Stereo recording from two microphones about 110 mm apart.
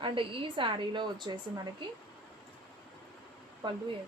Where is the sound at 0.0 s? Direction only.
50° right (ahead or behind).